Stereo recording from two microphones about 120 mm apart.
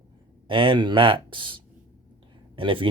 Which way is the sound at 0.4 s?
45° right (ahead or behind).